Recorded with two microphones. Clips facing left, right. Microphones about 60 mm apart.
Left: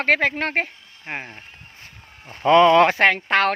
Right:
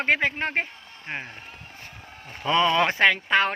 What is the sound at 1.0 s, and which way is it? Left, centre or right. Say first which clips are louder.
Speech: left 2 dB; left.